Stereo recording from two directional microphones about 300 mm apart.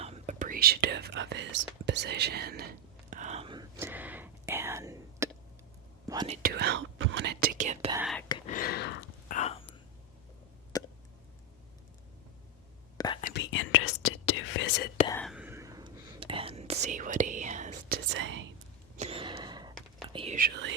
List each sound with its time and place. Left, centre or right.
0.0 s speech: right
3.1 s whispering: right
6.1 s speech: centre
7.9 s speech: centre
8.4 s a sound: left
9.4 s whispering: centre
10.7 s a sound: centre
13.2 s whispering: left
15.0 s whispering: centre; by 18.4 s right
18.9 s whispering: centre; by 20.7 s right